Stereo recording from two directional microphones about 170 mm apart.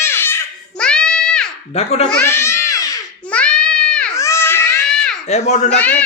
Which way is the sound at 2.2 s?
15° left (ahead or behind).